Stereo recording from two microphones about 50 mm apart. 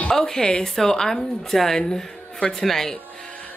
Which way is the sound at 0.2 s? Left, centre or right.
Centre.